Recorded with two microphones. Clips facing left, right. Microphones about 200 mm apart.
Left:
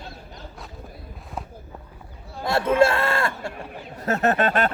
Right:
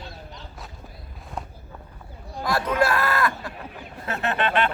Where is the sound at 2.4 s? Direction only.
25° left (ahead or behind).